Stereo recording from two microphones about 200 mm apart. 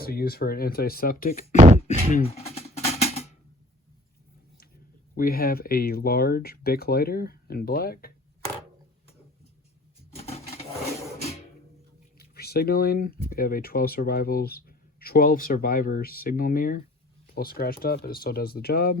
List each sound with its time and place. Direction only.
0.0 s speech: 50° left (ahead or behind)
1.5 s beatboxing: 40° right (ahead or behind)
2.1 s drum: 30° left (ahead or behind)
5.1 s speech: 45° left (ahead or behind)
10.2 s a sound: 30° left (ahead or behind)
12.2 s speech: 50° left (ahead or behind)